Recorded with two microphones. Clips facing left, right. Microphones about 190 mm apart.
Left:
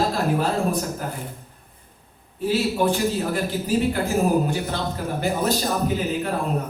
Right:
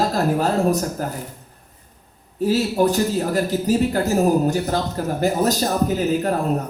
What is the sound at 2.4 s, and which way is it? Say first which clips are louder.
Speech: right 3 dB; 40° right (ahead or behind).